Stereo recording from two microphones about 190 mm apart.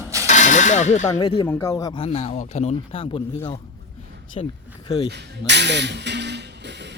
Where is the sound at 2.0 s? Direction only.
35° left (ahead or behind).